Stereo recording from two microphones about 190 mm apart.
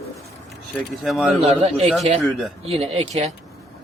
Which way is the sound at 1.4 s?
35° right (ahead or behind).